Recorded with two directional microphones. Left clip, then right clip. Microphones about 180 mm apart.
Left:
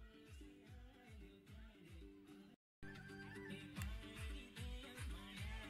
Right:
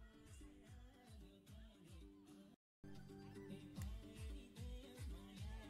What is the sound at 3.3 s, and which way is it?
Music, 10° right (ahead or behind).